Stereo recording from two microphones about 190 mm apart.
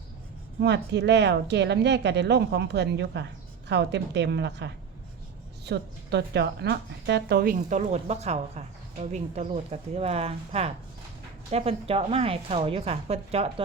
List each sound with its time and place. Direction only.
0.6 s a woman's voice: 60° right (ahead or behind); by 13.5 s 30° right (ahead or behind)